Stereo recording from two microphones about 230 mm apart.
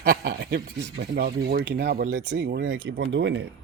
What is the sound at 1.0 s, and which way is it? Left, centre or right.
Speech, right.